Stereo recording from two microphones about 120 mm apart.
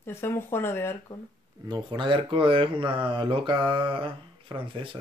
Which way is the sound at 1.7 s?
40° right (ahead or behind).